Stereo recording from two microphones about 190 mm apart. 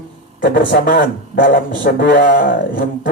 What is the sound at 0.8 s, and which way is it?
Speech, 55° left (ahead or behind).